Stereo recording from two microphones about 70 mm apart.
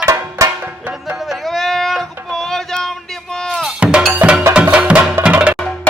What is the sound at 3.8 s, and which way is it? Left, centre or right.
Cowbell, centre.